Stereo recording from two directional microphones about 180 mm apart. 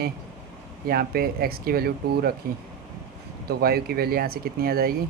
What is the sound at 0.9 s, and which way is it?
Speech, 55° right (ahead or behind).